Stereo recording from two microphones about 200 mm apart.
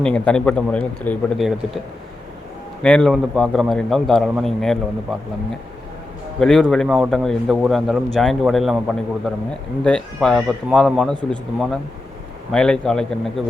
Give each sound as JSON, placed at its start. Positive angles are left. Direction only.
{"t": 0.0, "sound": "a man's voice", "side_deg": 5}
{"t": 2.8, "sound": "a man's voice", "side_deg": 5}
{"t": 6.4, "sound": "a man's voice", "side_deg": 0}